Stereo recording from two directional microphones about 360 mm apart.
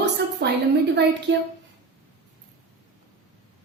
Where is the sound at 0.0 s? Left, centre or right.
Right.